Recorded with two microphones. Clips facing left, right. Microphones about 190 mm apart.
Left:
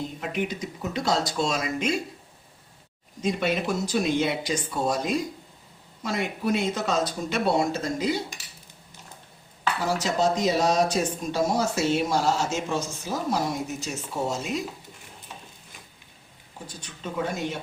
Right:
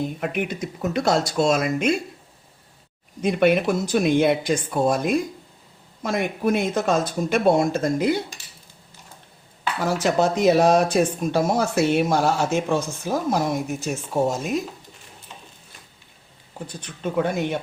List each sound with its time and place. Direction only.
0.2 s speech: 55° right (ahead or behind)
3.2 s speech: 60° right (ahead or behind)
9.8 s speech: 60° right (ahead or behind)
16.8 s speech: 60° right (ahead or behind)